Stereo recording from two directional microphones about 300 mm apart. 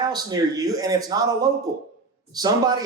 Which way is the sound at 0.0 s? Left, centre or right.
Centre.